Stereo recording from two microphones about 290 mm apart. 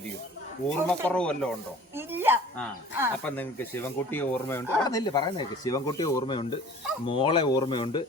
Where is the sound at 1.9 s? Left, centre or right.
Centre.